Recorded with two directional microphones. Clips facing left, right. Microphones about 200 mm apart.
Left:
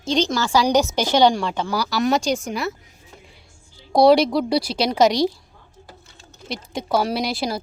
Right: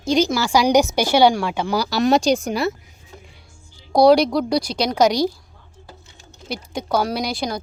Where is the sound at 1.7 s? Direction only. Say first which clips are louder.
Right 3 dB; 25° right (ahead or behind).